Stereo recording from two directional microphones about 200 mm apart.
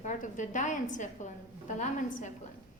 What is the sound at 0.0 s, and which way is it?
A woman's voice, 40° left (ahead or behind).